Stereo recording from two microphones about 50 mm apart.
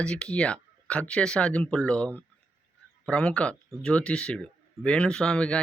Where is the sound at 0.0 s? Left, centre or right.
Centre.